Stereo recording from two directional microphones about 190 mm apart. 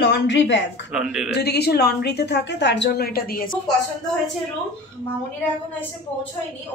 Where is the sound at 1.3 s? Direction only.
60° left (ahead or behind).